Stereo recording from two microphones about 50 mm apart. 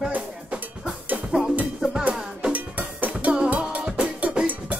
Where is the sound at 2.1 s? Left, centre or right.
Right.